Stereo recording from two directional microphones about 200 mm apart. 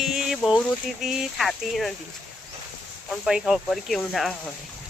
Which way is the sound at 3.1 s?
5° right (ahead or behind).